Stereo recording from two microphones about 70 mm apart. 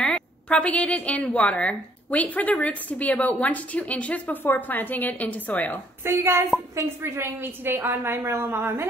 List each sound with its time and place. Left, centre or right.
0.0 s a woman's voice: centre
6.0 s a woman's voice: right